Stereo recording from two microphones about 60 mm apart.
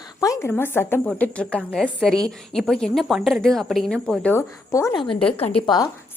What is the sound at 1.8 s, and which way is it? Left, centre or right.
A woman's voice, centre.